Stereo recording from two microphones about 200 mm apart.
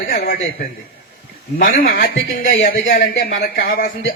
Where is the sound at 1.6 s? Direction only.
45° left (ahead or behind).